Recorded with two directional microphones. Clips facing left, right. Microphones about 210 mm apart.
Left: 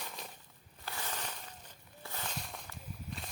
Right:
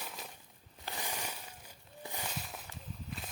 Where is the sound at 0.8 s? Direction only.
15° right (ahead or behind).